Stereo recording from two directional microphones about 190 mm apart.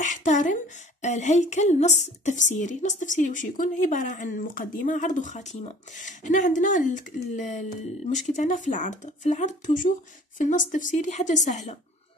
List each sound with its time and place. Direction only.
0.0 s a woman's voice: 40° left (ahead or behind)